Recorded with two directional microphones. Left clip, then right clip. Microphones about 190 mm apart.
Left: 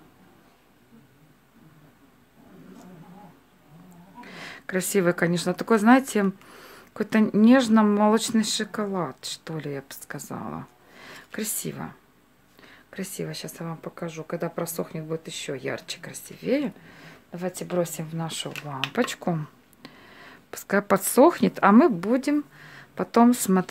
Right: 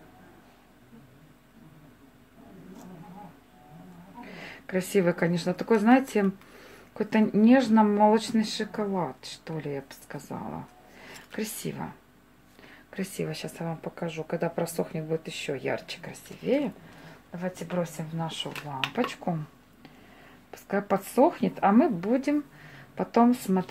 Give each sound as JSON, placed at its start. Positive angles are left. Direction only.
{"t": 4.2, "sound": "speech", "side_deg": 35}